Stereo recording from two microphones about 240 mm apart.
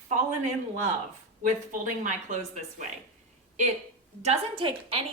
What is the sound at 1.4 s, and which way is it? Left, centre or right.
A woman's voice, right.